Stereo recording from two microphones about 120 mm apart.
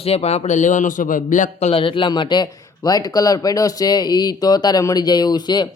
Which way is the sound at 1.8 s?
45° left (ahead or behind).